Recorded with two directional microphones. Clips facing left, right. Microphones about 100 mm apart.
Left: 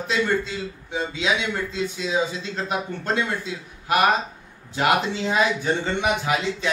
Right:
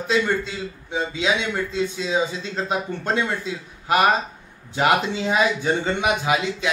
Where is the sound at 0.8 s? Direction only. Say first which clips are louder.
Right 2 dB; 20° right (ahead or behind).